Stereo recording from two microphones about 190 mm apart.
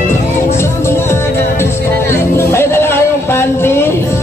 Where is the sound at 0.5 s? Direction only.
15° left (ahead or behind).